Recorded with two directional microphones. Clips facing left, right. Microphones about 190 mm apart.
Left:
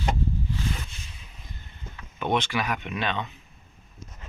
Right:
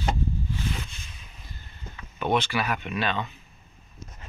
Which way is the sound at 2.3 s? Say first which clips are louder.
Right 1 dB; 20° left (ahead or behind).